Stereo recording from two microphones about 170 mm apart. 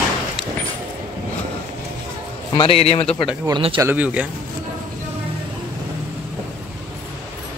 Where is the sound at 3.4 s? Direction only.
30° right (ahead or behind).